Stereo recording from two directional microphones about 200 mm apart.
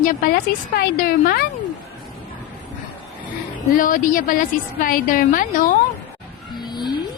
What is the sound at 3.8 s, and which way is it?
Speech, 45° left (ahead or behind).